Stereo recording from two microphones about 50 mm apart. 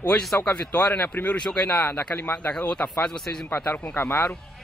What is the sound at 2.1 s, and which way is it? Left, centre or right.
Speech, left.